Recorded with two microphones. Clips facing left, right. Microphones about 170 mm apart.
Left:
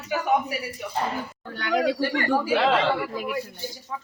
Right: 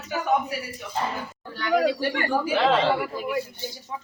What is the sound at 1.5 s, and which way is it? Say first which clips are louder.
Speech: right 1 dB; 55° left (ahead or behind).